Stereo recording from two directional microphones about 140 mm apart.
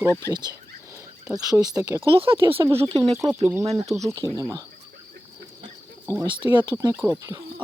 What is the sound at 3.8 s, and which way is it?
Speech, 25° right (ahead or behind).